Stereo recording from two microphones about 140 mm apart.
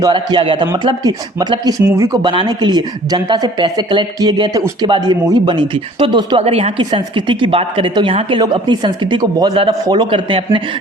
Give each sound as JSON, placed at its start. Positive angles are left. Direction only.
{"t": 0.0, "sound": "a woman's voice", "side_deg": -35}
{"t": 6.4, "sound": "a woman's voice", "side_deg": -50}